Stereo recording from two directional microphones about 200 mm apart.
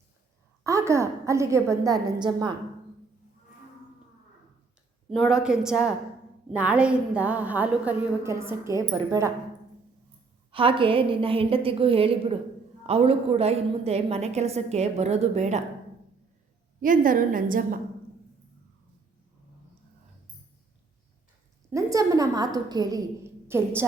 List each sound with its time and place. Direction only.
0.6 s a woman's voice: 15° right (ahead or behind)
5.0 s a woman's voice: centre (ahead or behind); by 9.3 s 15° right (ahead or behind)
10.5 s a woman's voice: 25° right (ahead or behind)
16.8 s a woman's voice: 40° right (ahead or behind)
21.7 s a woman's voice: 15° right (ahead or behind)